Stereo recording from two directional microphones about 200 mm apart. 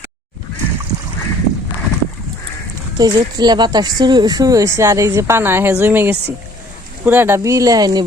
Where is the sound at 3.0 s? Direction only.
20° right (ahead or behind).